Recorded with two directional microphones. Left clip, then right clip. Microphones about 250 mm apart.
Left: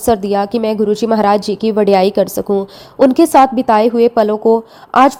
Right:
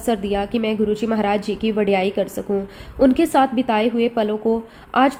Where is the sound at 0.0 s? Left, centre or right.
Left.